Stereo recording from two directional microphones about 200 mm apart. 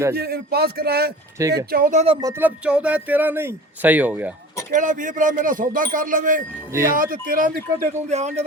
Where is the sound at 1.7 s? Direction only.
40° right (ahead or behind).